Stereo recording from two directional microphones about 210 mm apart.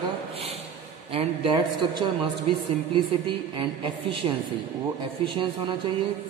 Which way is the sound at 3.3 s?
25° right (ahead or behind).